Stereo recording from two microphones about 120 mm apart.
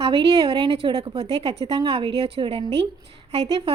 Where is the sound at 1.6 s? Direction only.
35° right (ahead or behind).